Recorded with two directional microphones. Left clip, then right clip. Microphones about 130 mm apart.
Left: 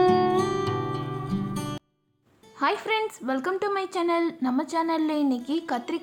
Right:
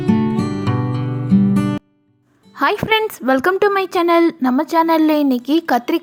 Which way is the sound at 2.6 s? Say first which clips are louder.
Right 9 dB; 70° right (ahead or behind).